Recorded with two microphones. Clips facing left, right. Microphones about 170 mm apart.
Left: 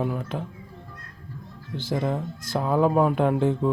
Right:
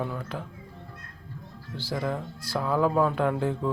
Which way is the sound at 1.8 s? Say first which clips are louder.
Left 4 dB; 20° left (ahead or behind).